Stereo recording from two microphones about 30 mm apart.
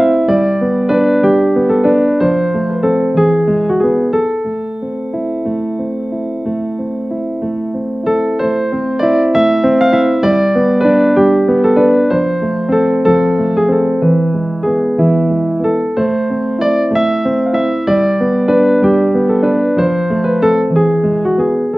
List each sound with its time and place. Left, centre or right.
0.0 s music: centre
9.0 s music: centre